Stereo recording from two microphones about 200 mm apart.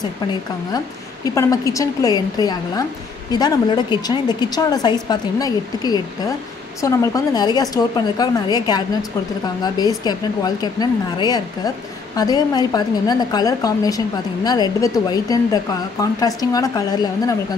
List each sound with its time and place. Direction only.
0.7 s a woman's voice: 15° left (ahead or behind)